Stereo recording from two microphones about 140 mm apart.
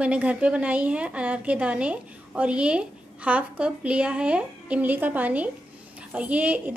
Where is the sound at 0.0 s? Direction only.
10° right (ahead or behind).